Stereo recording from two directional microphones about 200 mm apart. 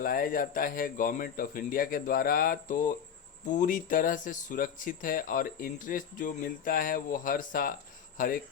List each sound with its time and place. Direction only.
0.0 s speech: 45° left (ahead or behind)